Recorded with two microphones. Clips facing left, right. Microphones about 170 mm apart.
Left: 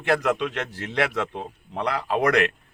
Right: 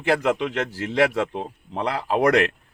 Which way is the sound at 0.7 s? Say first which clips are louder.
Right 5 dB; 30° right (ahead or behind).